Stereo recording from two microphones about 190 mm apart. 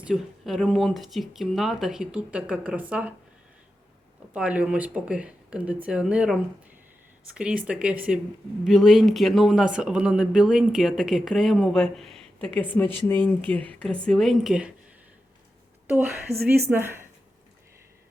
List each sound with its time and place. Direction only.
0.0 s speech: centre (ahead or behind)
4.4 s speech: 5° right (ahead or behind)
16.3 s speech: 35° right (ahead or behind)
16.6 s speech: 10° right (ahead or behind)